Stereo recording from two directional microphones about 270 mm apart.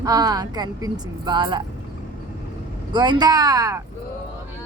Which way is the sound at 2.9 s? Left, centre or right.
Centre.